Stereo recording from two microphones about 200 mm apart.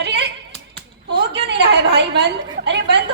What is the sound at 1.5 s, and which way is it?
Music, 55° right (ahead or behind).